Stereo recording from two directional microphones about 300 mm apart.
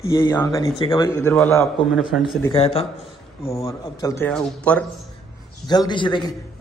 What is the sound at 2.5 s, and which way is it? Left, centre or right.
A man's voice, centre.